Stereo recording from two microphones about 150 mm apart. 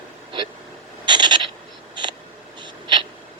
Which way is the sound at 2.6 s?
35° right (ahead or behind).